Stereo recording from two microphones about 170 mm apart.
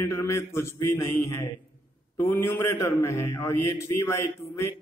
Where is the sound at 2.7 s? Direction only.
15° left (ahead or behind).